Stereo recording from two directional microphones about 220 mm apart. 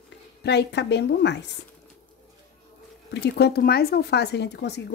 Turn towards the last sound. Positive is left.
turn(degrees=50)  # may be behind; listen again after turning